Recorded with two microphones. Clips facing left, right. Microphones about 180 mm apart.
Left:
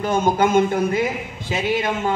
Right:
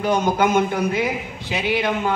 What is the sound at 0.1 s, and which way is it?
A man's voice, 50° left (ahead or behind).